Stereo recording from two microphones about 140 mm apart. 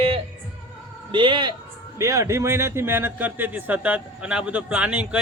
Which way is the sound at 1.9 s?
20° right (ahead or behind).